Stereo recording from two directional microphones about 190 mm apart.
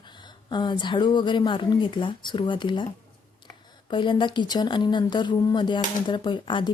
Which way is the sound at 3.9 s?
25° left (ahead or behind).